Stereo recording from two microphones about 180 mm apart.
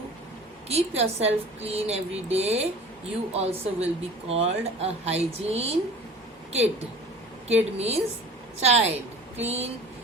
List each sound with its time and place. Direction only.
0.7 s speech: 35° right (ahead or behind)